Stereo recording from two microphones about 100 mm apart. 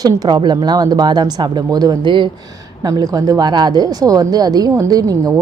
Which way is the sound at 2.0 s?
55° right (ahead or behind).